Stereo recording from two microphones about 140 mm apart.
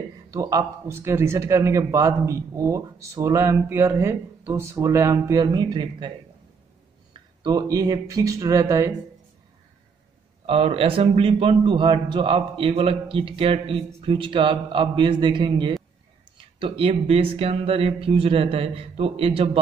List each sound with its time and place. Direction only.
0.3 s a man's voice: 25° right (ahead or behind)
7.4 s a man's voice: 25° right (ahead or behind)
10.4 s a man's voice: 45° right (ahead or behind)